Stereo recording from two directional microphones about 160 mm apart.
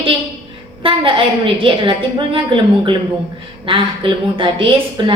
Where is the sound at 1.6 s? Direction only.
30° right (ahead or behind).